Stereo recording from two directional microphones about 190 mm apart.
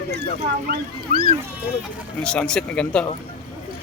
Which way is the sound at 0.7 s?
50° right (ahead or behind).